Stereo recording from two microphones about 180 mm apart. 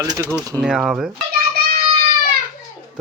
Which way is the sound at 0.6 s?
Centre (ahead or behind).